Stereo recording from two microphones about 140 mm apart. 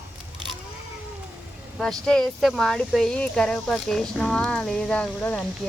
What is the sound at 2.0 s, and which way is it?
Speech, 5° left (ahead or behind).